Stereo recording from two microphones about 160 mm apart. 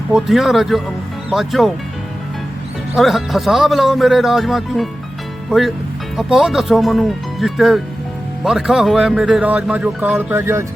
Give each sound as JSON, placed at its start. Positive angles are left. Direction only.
{"t": 0.1, "sound": "speech", "side_deg": 0}
{"t": 2.9, "sound": "speech", "side_deg": 0}